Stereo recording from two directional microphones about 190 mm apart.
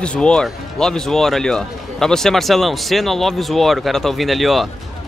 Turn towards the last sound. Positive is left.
turn(degrees=0)  # may be behind; listen again after turning